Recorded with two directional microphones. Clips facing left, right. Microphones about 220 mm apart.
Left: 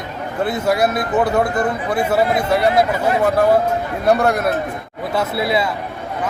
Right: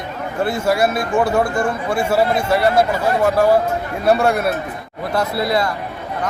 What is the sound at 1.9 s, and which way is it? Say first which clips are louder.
Speech: even; 20° left (ahead or behind).